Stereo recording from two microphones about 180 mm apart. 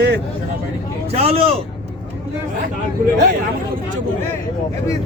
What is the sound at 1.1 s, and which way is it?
Speech, 35° right (ahead or behind).